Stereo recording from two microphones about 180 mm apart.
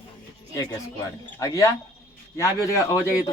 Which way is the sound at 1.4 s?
15° left (ahead or behind).